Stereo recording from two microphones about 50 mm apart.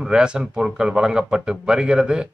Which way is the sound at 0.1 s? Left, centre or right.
Centre.